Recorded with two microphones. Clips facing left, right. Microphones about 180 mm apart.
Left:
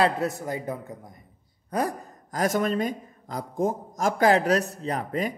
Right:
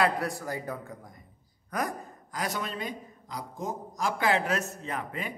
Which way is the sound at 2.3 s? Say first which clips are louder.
Left 9 dB; 45° left (ahead or behind).